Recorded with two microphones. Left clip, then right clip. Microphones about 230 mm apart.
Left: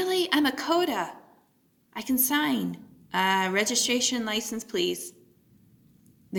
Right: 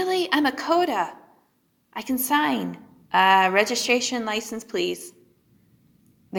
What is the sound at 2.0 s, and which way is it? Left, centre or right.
A woman's voice, left.